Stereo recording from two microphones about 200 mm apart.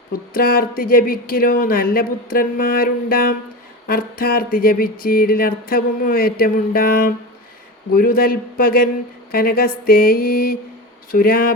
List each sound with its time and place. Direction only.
0.1 s speech: 45° left (ahead or behind)